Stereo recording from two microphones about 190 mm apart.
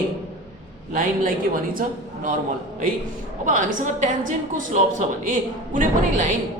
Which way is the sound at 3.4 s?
40° right (ahead or behind).